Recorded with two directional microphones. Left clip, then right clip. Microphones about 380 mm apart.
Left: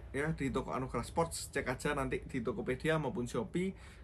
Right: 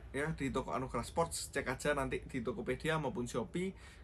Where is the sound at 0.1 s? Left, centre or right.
Centre.